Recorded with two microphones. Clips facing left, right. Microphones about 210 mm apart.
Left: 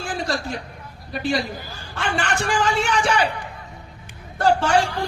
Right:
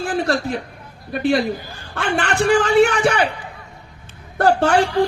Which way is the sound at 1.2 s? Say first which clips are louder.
Right 6 dB; 60° right (ahead or behind).